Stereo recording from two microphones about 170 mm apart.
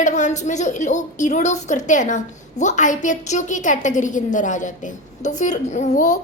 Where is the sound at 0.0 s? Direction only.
45° left (ahead or behind).